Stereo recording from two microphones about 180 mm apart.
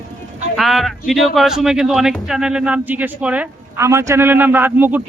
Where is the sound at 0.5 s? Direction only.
Centre (ahead or behind).